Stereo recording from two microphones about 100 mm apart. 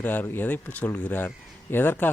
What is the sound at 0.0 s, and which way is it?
A man's voice, 20° left (ahead or behind).